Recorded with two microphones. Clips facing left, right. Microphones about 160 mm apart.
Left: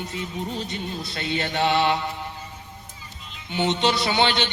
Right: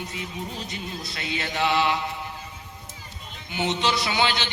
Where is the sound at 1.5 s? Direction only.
35° left (ahead or behind).